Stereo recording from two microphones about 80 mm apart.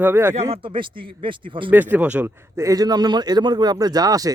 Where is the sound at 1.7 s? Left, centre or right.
Right.